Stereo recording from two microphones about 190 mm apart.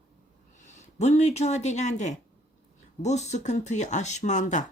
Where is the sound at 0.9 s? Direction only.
35° left (ahead or behind).